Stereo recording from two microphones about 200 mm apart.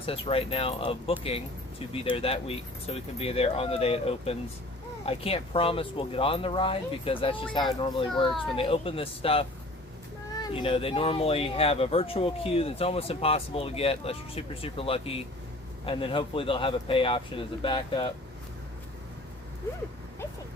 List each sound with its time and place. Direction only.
0.0 s speech: 30° left (ahead or behind)